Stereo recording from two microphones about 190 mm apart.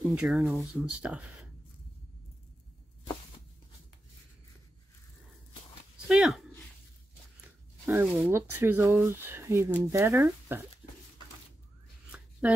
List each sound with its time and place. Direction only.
0.0 s speech: centre (ahead or behind)
6.0 s speech: centre (ahead or behind)
7.9 s speech: 5° right (ahead or behind)
12.1 s a sound: 5° right (ahead or behind)